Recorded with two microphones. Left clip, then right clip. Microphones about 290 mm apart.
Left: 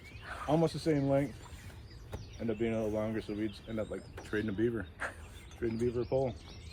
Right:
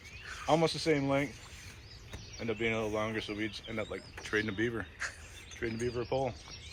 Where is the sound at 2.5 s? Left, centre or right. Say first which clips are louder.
Right 1 dB; centre.